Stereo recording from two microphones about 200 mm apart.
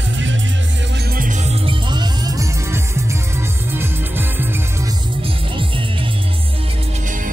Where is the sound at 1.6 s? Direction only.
20° right (ahead or behind).